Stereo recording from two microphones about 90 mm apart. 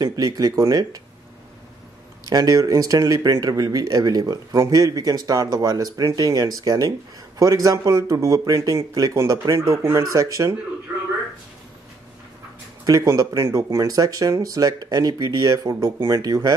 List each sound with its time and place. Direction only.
0.0 s speech: 45° right (ahead or behind)
2.2 s speech: 45° right (ahead or behind)
12.8 s speech: 40° right (ahead or behind)